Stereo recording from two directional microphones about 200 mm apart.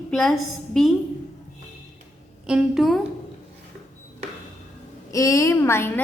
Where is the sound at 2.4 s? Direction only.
5° right (ahead or behind).